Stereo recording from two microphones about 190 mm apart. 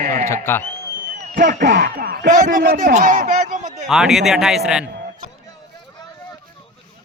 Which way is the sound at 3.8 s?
Centre (ahead or behind).